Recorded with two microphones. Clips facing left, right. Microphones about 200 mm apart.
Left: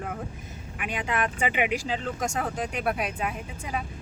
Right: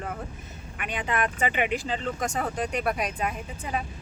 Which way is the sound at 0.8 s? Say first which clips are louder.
Even; 5° left (ahead or behind).